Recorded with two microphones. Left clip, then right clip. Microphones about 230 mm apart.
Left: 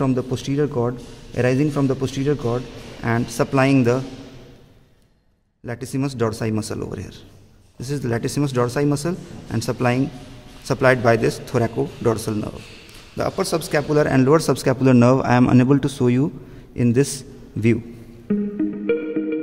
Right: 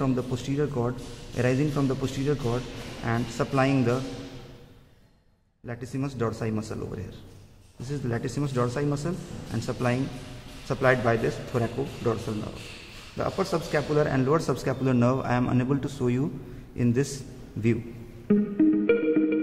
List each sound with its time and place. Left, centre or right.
0.0 s a man's voice: left
5.7 s a man's voice: left
18.3 s music: centre